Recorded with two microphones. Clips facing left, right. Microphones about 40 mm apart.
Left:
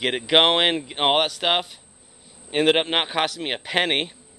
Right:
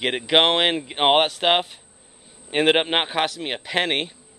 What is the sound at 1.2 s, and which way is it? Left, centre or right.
Speech, right.